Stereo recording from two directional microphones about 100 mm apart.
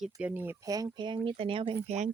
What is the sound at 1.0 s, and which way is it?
Speech, 55° right (ahead or behind).